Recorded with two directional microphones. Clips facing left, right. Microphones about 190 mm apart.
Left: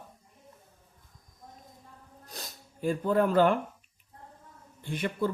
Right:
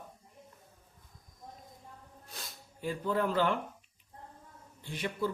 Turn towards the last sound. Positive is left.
turn(degrees=55)  # may be behind; listen again after turning